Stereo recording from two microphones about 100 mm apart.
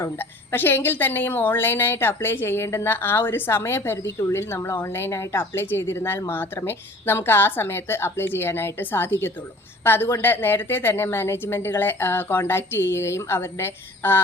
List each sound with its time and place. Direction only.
0.0 s a woman's voice: 20° left (ahead or behind)